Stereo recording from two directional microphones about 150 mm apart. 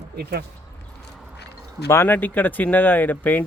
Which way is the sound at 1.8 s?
15° left (ahead or behind).